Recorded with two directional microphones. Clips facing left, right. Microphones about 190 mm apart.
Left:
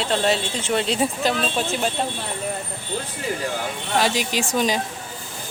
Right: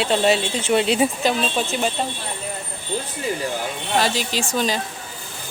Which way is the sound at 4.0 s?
15° left (ahead or behind).